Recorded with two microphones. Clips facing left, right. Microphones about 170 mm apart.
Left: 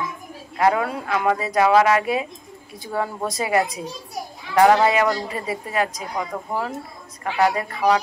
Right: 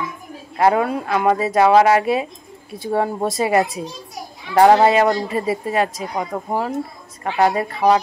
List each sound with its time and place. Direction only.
0.6 s speech: 30° right (ahead or behind)